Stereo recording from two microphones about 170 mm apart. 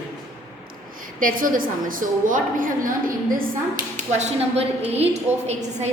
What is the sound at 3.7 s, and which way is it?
Speech, 45° right (ahead or behind).